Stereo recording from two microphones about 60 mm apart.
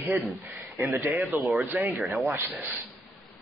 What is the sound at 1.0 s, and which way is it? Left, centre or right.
Speech, right.